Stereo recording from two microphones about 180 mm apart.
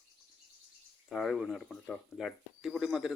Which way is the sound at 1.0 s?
Centre (ahead or behind).